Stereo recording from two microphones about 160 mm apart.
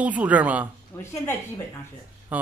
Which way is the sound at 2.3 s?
10° right (ahead or behind).